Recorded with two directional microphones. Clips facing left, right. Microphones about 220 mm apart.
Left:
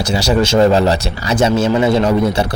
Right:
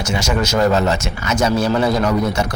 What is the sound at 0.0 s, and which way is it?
Speech, 35° left (ahead or behind).